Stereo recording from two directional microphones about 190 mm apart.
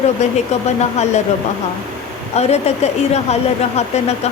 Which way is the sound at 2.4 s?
35° left (ahead or behind).